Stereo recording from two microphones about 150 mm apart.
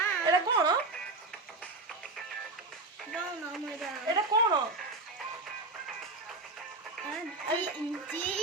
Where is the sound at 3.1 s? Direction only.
Centre (ahead or behind).